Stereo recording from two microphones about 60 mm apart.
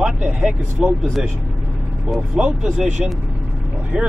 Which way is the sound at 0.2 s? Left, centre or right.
Centre.